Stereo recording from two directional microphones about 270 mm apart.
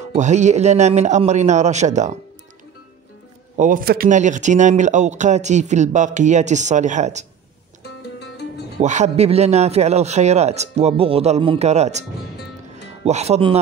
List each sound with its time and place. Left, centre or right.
0.1 s speech: right
3.5 s speech: right
8.7 s speech: right